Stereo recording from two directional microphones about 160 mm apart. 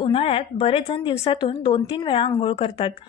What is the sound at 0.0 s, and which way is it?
A woman's voice, 35° left (ahead or behind).